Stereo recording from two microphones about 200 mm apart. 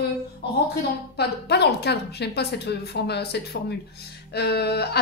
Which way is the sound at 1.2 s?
55° left (ahead or behind).